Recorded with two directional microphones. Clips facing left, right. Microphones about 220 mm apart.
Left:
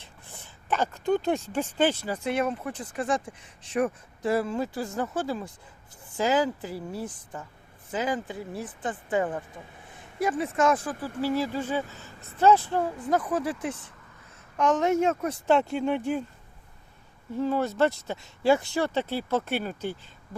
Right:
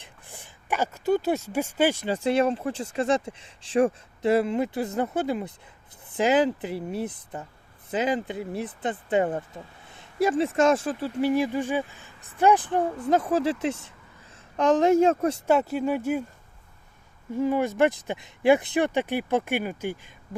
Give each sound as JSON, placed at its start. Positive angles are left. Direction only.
{"t": 0.0, "sound": "speech", "side_deg": -15}
{"t": 2.0, "sound": "speech", "side_deg": -30}
{"t": 15.4, "sound": "speech", "side_deg": -5}
{"t": 17.3, "sound": "speech", "side_deg": -15}